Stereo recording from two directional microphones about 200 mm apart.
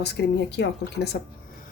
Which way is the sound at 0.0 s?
55° left (ahead or behind).